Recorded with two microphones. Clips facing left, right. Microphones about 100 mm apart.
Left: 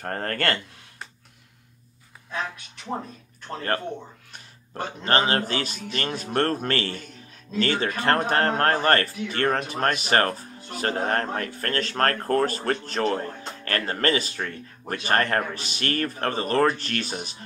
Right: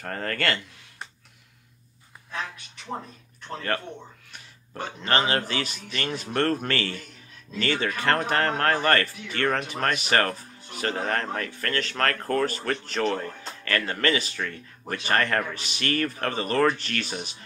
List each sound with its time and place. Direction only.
0.0 s speech: 40° left (ahead or behind)
3.5 s speech: 35° left (ahead or behind)